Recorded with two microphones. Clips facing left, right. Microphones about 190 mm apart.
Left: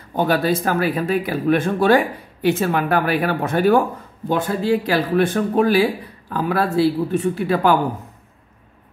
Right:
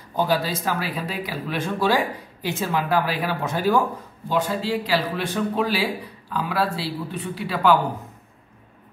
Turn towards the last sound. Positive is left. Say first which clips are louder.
# left 3 dB
turn(degrees=50)  # may be behind; listen again after turning